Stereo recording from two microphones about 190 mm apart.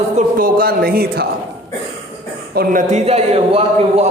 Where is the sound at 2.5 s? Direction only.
50° right (ahead or behind); by 4.1 s 30° right (ahead or behind).